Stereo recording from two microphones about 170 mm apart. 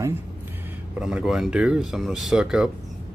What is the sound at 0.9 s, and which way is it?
Speech, 5° right (ahead or behind).